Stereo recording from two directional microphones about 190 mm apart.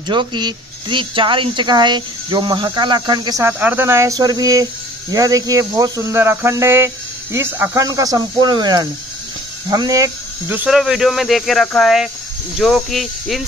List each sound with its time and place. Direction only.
0.1 s a woman's voice: 25° right (ahead or behind)
5.1 s cricket: 20° right (ahead or behind)
7.3 s a woman's voice: 10° right (ahead or behind)